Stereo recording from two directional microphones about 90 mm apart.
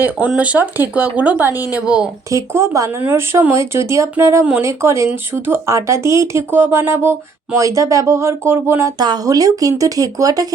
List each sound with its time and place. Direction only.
0.3 s speech: 15° right (ahead or behind)
2.3 s speech: 35° right (ahead or behind)
9.0 s speech: 50° right (ahead or behind)